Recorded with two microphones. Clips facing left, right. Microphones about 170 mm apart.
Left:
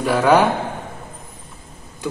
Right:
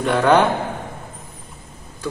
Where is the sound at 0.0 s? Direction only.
5° left (ahead or behind).